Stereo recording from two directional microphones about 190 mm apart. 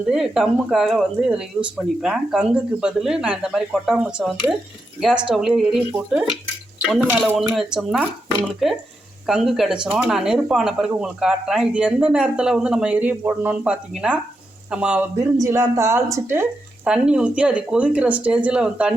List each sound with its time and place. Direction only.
0.1 s speech: 5° right (ahead or behind)
6.8 s speech: 5° right (ahead or behind)